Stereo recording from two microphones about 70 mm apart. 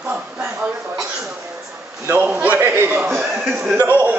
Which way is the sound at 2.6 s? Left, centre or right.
Right.